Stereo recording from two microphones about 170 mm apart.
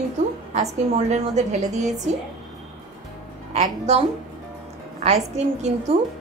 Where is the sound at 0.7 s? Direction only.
40° right (ahead or behind).